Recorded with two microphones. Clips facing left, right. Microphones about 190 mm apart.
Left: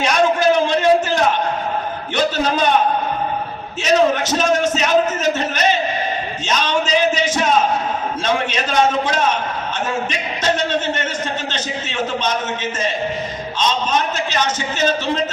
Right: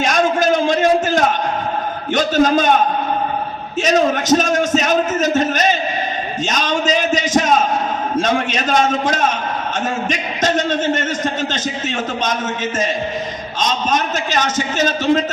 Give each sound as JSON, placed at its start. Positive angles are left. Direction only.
{"t": 0.0, "sound": "a sound", "side_deg": -45}
{"t": 2.1, "sound": "a man's voice", "side_deg": -45}
{"t": 3.8, "sound": "a man's voice", "side_deg": -45}
{"t": 13.6, "sound": "a man's voice", "side_deg": -45}